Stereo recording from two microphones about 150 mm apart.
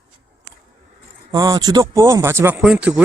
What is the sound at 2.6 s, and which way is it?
Speech, 5° right (ahead or behind).